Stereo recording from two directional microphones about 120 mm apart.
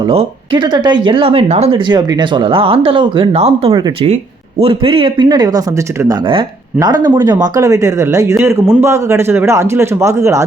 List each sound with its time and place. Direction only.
0.5 s speech: 40° right (ahead or behind); by 1.8 s 60° right (ahead or behind)
1.9 s speech: 35° right (ahead or behind)
3.3 s speech: 60° right (ahead or behind)
3.7 s speech: 35° right (ahead or behind)
4.6 s a man's voice: 50° right (ahead or behind); by 10.4 s 25° right (ahead or behind)